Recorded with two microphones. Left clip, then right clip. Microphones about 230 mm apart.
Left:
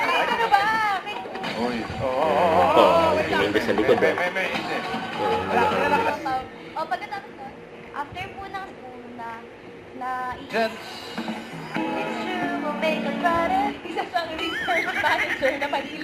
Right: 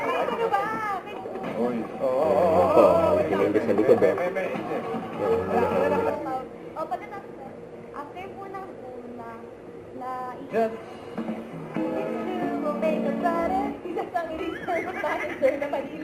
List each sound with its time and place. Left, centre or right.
0.0 s chatter: centre
11.3 s speech: centre